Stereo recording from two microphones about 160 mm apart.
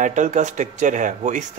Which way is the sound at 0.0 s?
50° right (ahead or behind).